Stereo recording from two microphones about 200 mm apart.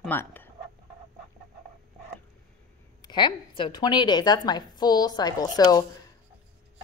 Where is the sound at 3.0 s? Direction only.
20° left (ahead or behind).